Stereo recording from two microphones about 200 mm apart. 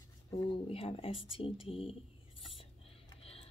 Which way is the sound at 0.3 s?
25° left (ahead or behind).